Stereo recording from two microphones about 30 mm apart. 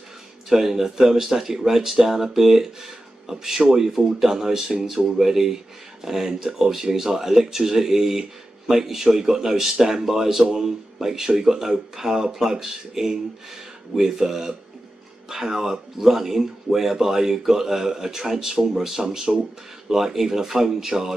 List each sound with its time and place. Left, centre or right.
0.5 s speech: centre
18.6 s speech: centre